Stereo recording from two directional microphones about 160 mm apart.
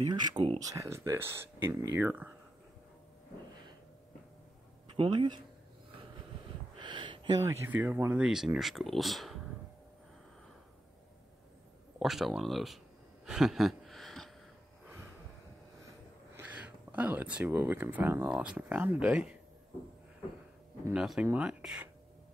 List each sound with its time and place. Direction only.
0.1 s speech: 30° right (ahead or behind)
0.6 s speech: 20° right (ahead or behind)
4.9 s speech: 30° right (ahead or behind)
6.8 s speech: 30° right (ahead or behind); by 9.4 s centre (ahead or behind)
12.0 s a sound: centre (ahead or behind)
16.3 s speech: 10° right (ahead or behind)
20.9 s speech: 5° right (ahead or behind)